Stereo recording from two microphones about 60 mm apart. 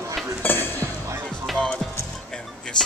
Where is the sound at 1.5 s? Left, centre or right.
Centre.